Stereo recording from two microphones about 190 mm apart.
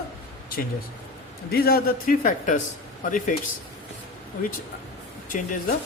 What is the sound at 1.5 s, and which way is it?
A man's voice, 55° left (ahead or behind).